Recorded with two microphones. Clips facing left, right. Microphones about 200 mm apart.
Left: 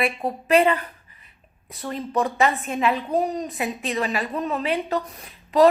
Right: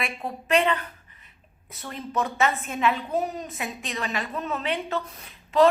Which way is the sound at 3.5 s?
35° left (ahead or behind).